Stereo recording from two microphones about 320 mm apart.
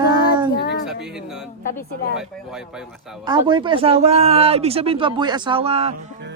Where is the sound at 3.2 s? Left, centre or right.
Centre.